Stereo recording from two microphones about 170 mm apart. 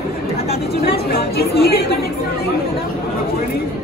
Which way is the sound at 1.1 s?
65° left (ahead or behind).